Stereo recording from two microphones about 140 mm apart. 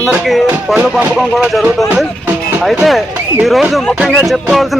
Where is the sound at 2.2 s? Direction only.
5° right (ahead or behind).